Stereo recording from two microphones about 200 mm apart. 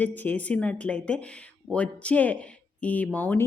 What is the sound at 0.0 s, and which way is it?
A woman's voice, 10° left (ahead or behind).